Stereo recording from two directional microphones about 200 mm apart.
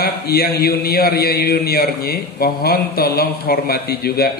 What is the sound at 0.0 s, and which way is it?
A man's voice, 50° left (ahead or behind).